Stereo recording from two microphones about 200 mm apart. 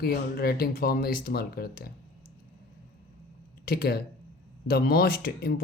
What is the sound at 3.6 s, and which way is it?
Speech, 50° left (ahead or behind).